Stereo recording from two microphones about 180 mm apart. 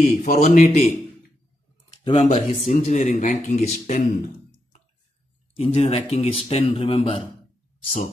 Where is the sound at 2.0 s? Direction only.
35° left (ahead or behind).